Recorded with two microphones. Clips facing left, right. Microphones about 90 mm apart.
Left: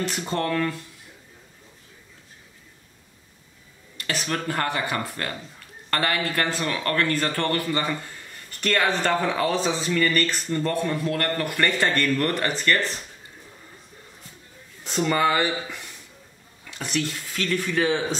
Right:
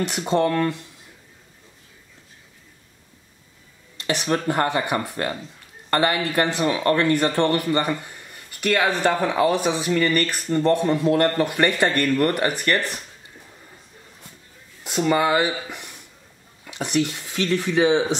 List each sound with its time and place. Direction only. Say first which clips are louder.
0.0 s speech: right 6 dB; 15° right (ahead or behind)
3.9 s speech: right 5 dB; 20° right (ahead or behind)
14.8 s speech: right 2 dB; 10° right (ahead or behind)